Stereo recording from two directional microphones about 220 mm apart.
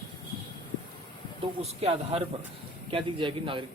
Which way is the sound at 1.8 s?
25° right (ahead or behind).